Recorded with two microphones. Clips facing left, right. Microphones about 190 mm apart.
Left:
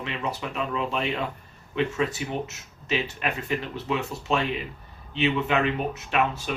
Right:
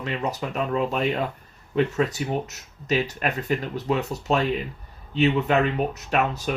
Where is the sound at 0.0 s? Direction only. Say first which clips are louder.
Right 3 dB; 40° right (ahead or behind).